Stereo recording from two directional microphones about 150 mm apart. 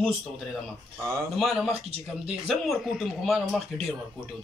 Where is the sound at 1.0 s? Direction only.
15° right (ahead or behind).